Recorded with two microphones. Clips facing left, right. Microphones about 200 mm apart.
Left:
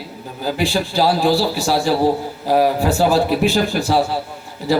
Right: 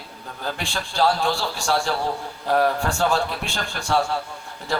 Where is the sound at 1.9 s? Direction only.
30° left (ahead or behind).